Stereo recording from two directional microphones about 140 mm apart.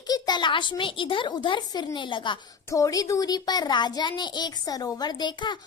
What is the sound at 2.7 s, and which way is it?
A child's voice, 25° left (ahead or behind).